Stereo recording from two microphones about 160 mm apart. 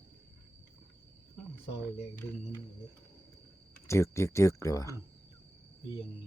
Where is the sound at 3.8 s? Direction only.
15° left (ahead or behind).